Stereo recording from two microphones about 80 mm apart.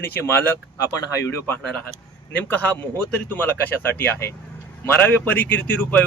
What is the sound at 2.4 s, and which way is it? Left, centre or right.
Speech, left.